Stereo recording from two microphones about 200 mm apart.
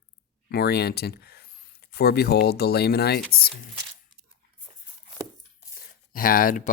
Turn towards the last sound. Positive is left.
turn(degrees=45)  # may be behind; listen again after turning